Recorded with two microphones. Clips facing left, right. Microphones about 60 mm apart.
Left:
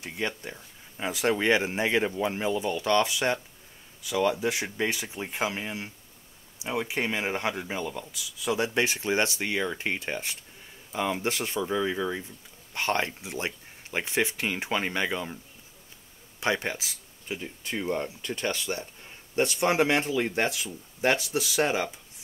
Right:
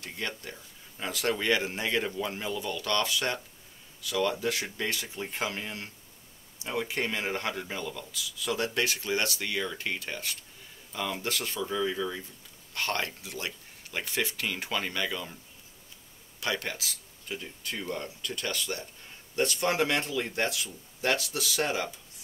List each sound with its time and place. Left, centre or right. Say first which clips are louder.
0.0 s speech: left 4 dB; centre
16.3 s speech: left 4 dB; left